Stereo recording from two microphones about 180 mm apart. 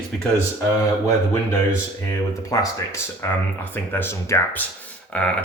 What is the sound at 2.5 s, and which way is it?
Speech, 20° left (ahead or behind).